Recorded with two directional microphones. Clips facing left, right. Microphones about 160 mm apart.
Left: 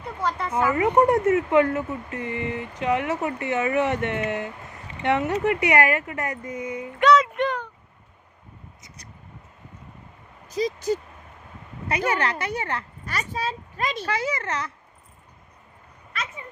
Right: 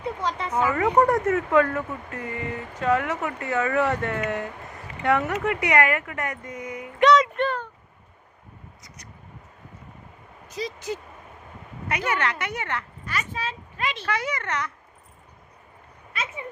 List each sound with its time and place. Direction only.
0.2 s speech: 5° left (ahead or behind)
0.7 s speech: 20° left (ahead or behind)
7.0 s a sound: centre (ahead or behind)
7.3 s a sound: 15° left (ahead or behind)
10.5 s speech: 40° left (ahead or behind)
14.2 s speech: 30° left (ahead or behind)